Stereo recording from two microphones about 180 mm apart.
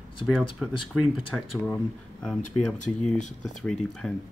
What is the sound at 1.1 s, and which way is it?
Speech, centre (ahead or behind).